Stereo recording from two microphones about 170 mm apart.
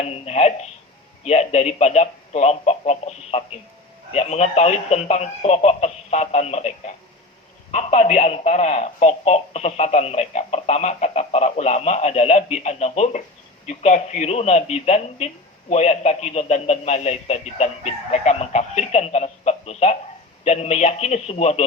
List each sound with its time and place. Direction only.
0.0 s telephone: 40° left (ahead or behind)
1.2 s speech: 40° left (ahead or behind)